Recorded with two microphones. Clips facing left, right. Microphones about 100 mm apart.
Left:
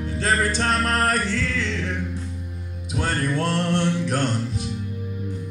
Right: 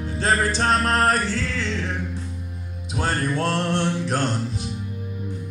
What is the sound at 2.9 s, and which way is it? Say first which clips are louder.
Music: even; 35° right (ahead or behind).